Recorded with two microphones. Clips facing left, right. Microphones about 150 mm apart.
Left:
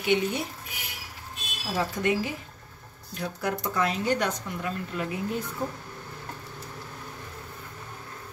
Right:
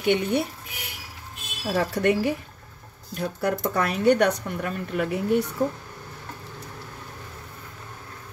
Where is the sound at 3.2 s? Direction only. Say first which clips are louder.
Right 5 dB; 50° right (ahead or behind); by 5.5 s 70° right (ahead or behind).